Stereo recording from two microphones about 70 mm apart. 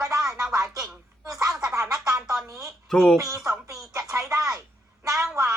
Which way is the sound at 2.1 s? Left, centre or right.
Right.